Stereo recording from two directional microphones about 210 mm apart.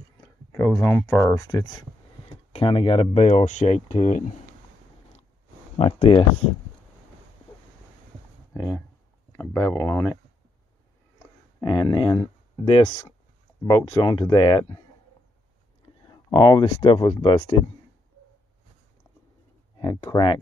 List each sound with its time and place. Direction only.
0.2 s speech: 15° left (ahead or behind); by 4.2 s 30° left (ahead or behind)
5.8 s speech: 30° left (ahead or behind)
8.5 s speech: 15° left (ahead or behind)
11.6 s speech: 20° left (ahead or behind)
16.1 s speech: 20° left (ahead or behind)
19.8 s speech: 20° left (ahead or behind)